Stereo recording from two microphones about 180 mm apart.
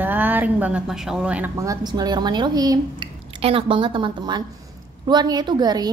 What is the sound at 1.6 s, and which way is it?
A woman's voice, 20° right (ahead or behind).